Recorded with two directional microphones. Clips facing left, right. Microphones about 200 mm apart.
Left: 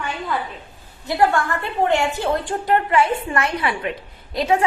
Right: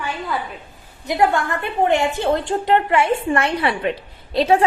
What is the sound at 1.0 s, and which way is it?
A woman's voice, 20° right (ahead or behind).